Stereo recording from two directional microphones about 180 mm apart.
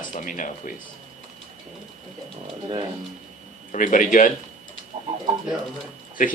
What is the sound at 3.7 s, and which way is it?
Speech, 45° left (ahead or behind).